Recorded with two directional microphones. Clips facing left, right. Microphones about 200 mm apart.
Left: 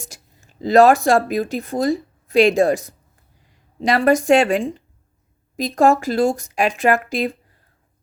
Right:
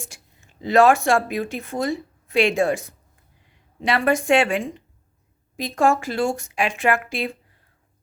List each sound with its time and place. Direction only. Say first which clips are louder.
0.0 s speech: even; 40° left (ahead or behind)